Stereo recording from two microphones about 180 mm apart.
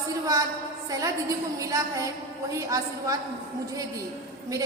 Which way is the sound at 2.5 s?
20° right (ahead or behind).